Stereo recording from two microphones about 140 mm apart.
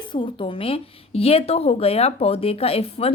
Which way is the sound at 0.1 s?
35° left (ahead or behind).